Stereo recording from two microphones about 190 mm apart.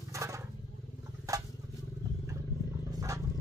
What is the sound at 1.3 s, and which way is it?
Vehicle, 15° right (ahead or behind).